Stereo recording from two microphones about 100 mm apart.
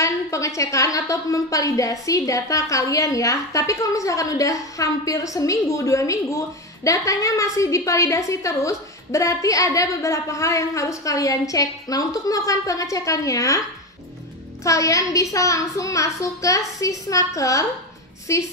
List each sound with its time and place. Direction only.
0.0 s a woman's voice: 30° left (ahead or behind)
14.6 s a woman's voice: 30° left (ahead or behind)